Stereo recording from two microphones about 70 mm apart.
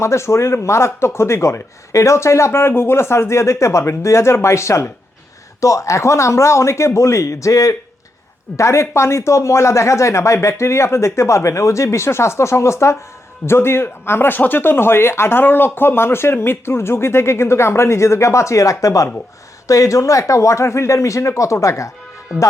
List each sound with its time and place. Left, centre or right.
0.0 s speech: left